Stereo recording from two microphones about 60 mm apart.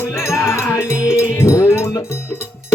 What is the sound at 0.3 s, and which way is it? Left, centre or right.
Music, left.